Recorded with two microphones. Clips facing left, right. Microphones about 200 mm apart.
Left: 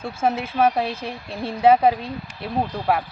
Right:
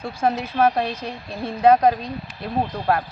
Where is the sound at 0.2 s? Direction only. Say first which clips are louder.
Even; 5° left (ahead or behind).